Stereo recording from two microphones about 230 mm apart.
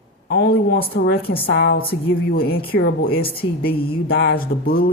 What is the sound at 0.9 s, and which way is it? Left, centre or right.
A woman's voice, left.